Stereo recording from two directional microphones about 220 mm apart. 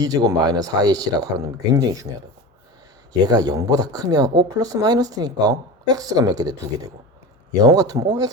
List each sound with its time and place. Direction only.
0.0 s speech: 15° right (ahead or behind)
3.1 s speech: 20° right (ahead or behind)